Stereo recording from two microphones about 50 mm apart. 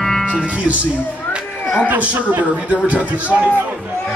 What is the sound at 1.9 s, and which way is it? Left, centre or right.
A man's voice, right.